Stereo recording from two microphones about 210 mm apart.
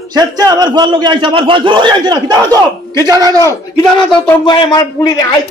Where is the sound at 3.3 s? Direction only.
15° left (ahead or behind).